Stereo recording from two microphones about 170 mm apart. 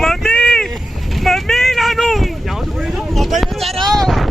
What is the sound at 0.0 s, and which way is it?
Vehicle, 5° left (ahead or behind).